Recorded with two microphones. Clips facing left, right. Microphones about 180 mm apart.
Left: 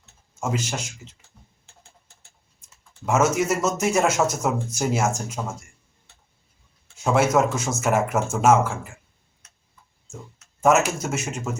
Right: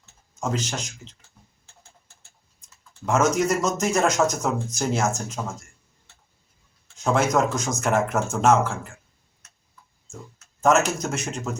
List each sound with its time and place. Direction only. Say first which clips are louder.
0.3 s speech: even; 10° left (ahead or behind)
3.1 s speech: even; 5° left (ahead or behind)
6.9 s speech: left 2 dB; 5° left (ahead or behind)
10.6 s speech: left 1 dB; 10° left (ahead or behind)